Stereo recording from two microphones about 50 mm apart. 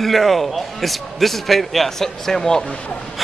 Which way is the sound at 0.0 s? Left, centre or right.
Centre.